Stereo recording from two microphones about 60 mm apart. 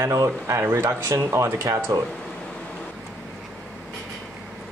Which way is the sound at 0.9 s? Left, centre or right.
Right.